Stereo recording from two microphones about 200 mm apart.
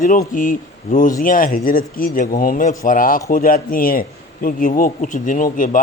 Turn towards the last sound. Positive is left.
turn(degrees=40)  # may be behind; listen again after turning